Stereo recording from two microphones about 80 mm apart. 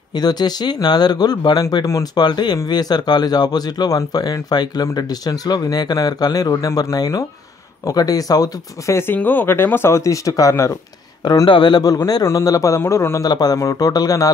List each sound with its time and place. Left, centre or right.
0.1 s speech: left
8.9 s speech: left
11.4 s speech: left
12.1 s speech: left
13.2 s speech: left